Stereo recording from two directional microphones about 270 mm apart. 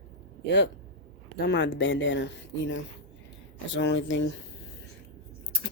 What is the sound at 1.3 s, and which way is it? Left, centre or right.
Speech, left.